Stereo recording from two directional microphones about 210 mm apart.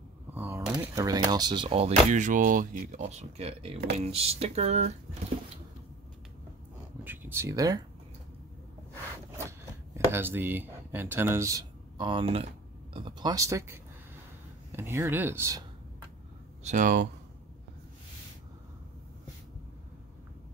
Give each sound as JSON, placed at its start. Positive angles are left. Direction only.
{"t": 0.3, "sound": "speech", "side_deg": -10}
{"t": 7.1, "sound": "speech", "side_deg": -10}
{"t": 9.9, "sound": "speech", "side_deg": -10}
{"t": 16.6, "sound": "speech", "side_deg": -40}